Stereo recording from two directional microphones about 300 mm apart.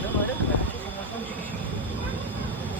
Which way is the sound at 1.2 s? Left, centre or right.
Centre.